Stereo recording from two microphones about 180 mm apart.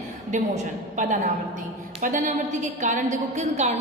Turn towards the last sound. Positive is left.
turn(degrees=-40)  # may be behind; listen again after turning